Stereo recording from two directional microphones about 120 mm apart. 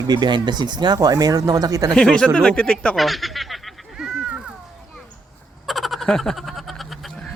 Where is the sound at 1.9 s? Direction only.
5° left (ahead or behind).